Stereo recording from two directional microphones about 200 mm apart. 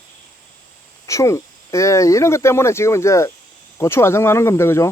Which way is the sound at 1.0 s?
15° left (ahead or behind).